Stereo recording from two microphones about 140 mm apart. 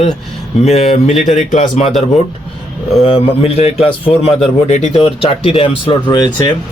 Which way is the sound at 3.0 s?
40° left (ahead or behind).